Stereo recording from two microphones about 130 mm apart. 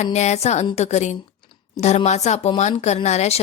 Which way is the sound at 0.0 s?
60° left (ahead or behind).